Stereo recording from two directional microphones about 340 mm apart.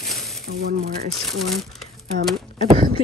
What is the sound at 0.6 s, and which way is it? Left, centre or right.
Speech, right.